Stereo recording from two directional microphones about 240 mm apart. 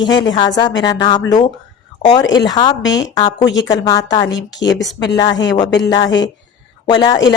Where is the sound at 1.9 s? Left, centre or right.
Centre.